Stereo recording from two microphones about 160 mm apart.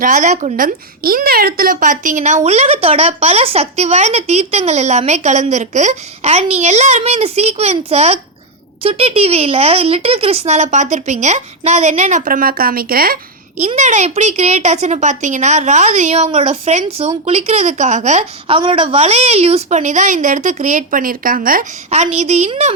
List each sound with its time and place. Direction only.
0.0 s speech: 55° right (ahead or behind)
13.7 s speech: 50° right (ahead or behind)
18.4 s speech: 35° right (ahead or behind); by 21.7 s 60° right (ahead or behind)
21.8 s speech: 45° right (ahead or behind)